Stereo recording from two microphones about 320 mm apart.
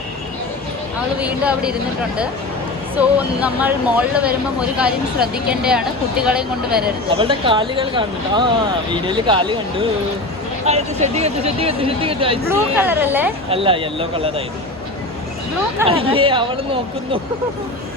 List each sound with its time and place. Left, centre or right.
1.2 s speech: centre
3.0 s speech: centre
7.2 s speech: centre
12.7 s speech: centre
13.5 s speech: centre
15.9 s speech: centre